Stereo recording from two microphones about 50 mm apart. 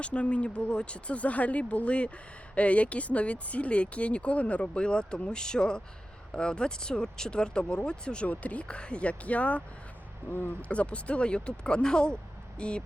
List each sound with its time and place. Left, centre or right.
0.0 s speech: left
10.2 s speech: left
10.6 s speech: left